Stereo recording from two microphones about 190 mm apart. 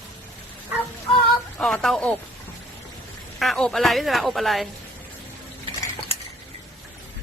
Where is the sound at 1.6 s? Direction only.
5° left (ahead or behind).